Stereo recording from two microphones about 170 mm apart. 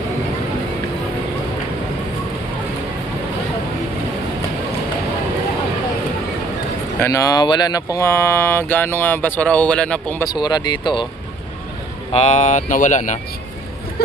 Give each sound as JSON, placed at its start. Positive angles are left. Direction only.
{"t": 7.0, "sound": "speech", "side_deg": 20}
{"t": 7.9, "sound": "a sound", "side_deg": 15}
{"t": 10.2, "sound": "speech", "side_deg": 25}
{"t": 12.1, "sound": "speech", "side_deg": 40}